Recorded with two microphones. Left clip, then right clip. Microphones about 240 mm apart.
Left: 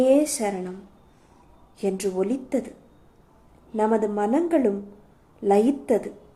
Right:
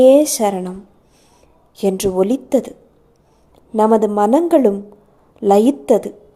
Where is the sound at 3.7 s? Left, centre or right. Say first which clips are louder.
Right 9 dB; right.